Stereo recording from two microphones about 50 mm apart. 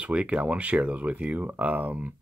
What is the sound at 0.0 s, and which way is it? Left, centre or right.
Speech, right.